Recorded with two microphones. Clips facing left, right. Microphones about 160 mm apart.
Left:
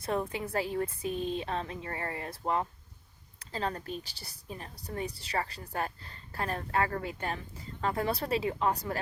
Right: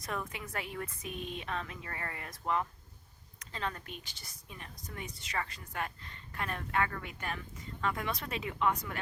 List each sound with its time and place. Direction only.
0.0 s a woman's voice: 30° left (ahead or behind)